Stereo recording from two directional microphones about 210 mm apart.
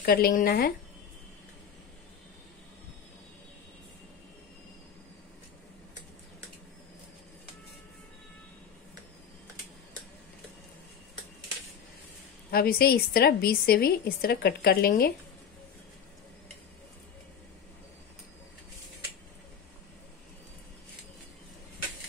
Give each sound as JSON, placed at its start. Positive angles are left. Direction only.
{"t": 0.0, "sound": "a woman's voice", "side_deg": 45}
{"t": 12.4, "sound": "a woman's voice", "side_deg": 45}